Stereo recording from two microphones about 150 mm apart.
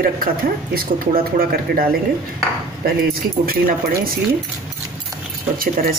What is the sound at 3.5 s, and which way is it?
Speech, 75° right (ahead or behind).